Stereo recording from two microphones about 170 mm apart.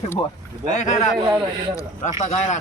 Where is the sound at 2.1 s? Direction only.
45° left (ahead or behind).